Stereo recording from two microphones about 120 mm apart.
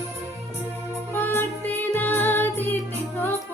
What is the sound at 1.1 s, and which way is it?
Music, 15° left (ahead or behind).